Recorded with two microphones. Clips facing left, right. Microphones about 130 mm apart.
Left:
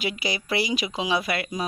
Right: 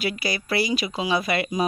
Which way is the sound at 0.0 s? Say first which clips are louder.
Right 2 dB; 15° left (ahead or behind).